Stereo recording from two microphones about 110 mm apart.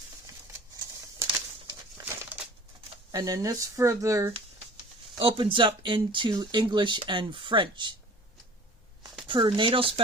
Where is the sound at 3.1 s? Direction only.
35° right (ahead or behind).